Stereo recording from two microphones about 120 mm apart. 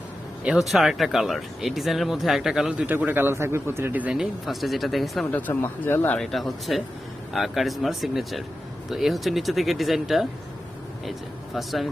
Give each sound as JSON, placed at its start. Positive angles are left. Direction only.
{"t": 0.4, "sound": "speech", "side_deg": -5}
{"t": 5.3, "sound": "speech", "side_deg": 15}
{"t": 6.1, "sound": "speech", "side_deg": 0}